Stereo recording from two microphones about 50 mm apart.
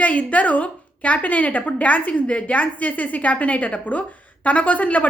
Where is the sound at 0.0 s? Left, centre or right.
Left.